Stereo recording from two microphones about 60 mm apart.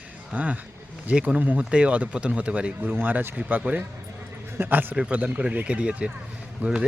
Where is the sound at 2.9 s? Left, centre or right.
Right.